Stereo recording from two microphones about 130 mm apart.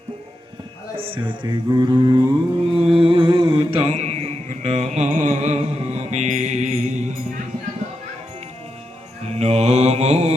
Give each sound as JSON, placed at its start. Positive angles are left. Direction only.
{"t": 0.9, "sound": "mantra", "side_deg": -45}
{"t": 2.7, "sound": "mantra", "side_deg": -45}
{"t": 3.9, "sound": "music", "side_deg": -55}
{"t": 9.2, "sound": "mantra", "side_deg": -55}